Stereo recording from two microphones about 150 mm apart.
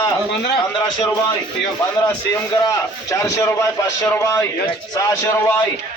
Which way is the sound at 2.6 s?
20° left (ahead or behind).